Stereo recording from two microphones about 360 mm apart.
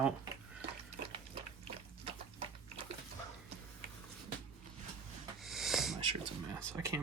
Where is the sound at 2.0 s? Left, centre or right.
Centre.